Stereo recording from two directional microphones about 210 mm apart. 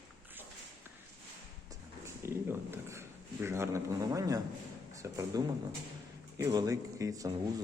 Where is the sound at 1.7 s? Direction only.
10° right (ahead or behind).